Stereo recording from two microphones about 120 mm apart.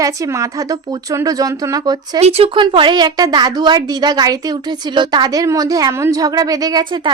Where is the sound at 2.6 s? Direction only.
40° right (ahead or behind).